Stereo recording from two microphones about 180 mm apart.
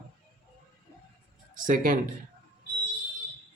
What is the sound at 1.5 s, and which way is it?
Speech, 45° right (ahead or behind).